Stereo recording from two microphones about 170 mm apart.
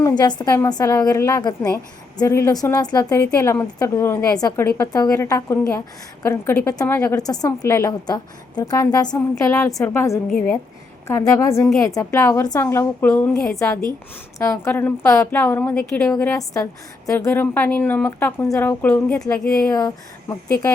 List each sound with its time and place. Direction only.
0.0 s a woman's voice: 25° left (ahead or behind)
6.9 s a woman's voice: 10° left (ahead or behind)
7.2 s a woman's voice: 20° left (ahead or behind); by 19.7 s 5° left (ahead or behind)
19.7 s a woman's voice: 20° left (ahead or behind)